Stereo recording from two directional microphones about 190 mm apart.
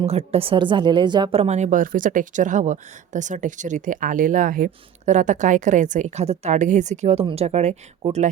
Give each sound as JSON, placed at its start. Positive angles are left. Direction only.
{"t": 0.0, "sound": "speech", "side_deg": -30}